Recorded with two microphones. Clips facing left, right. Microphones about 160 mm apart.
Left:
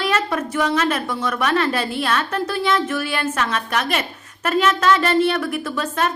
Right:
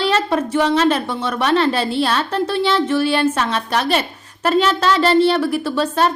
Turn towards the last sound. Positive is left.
turn(degrees=-30)  # may be behind; listen again after turning